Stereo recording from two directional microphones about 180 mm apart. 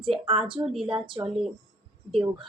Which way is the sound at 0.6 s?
Centre (ahead or behind).